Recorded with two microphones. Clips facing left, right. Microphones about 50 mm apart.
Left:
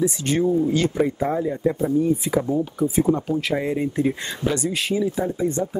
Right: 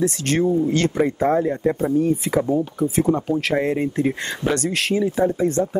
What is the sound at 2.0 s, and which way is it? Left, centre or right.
Speech, right.